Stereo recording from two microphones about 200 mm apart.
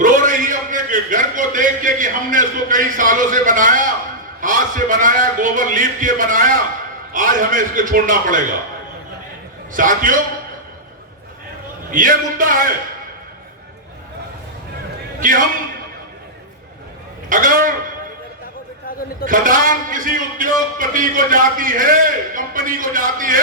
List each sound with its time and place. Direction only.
0.0 s a sound: 40° right (ahead or behind)
4.4 s a man's voice: 40° right (ahead or behind)
9.7 s a man's voice: 40° right (ahead or behind)
11.9 s a man's voice: 45° right (ahead or behind)
15.2 s a man's voice: 40° right (ahead or behind)
17.2 s a man's voice: 45° right (ahead or behind)
19.2 s a man's voice: 40° right (ahead or behind)